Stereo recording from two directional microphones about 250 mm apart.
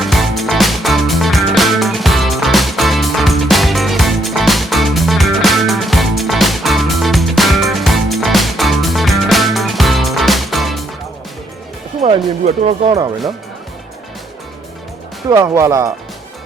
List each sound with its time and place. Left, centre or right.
0.0 s music: centre
12.6 s speech: right
15.3 s speech: centre